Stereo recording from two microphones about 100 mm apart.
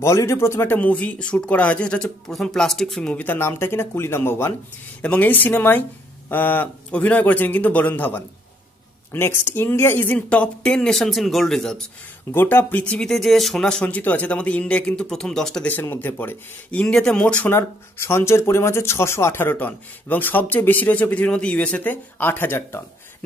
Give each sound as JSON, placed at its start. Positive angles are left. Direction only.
{"t": 0.0, "sound": "speech", "side_deg": 30}
{"t": 3.3, "sound": "speech", "side_deg": 25}
{"t": 12.3, "sound": "speech", "side_deg": 20}
{"t": 15.7, "sound": "speech", "side_deg": 20}
{"t": 16.8, "sound": "speech", "side_deg": 5}
{"t": 17.6, "sound": "speech", "side_deg": 25}